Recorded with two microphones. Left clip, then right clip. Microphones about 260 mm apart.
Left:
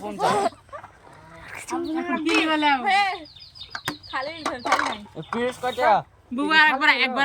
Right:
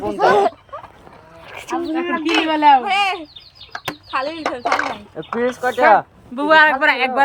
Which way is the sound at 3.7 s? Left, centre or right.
Centre.